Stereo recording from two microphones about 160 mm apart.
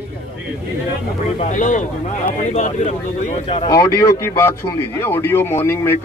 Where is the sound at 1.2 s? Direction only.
50° left (ahead or behind).